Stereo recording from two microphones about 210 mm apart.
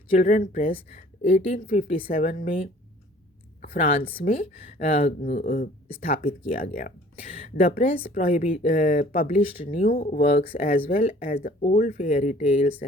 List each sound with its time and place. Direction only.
0.1 s speech: 40° left (ahead or behind)
3.6 s a sound: 40° left (ahead or behind)
4.7 s speech: 30° left (ahead or behind)
5.2 s speech: 40° left (ahead or behind)
5.9 s speech: 30° left (ahead or behind)
6.2 s speech: 45° left (ahead or behind)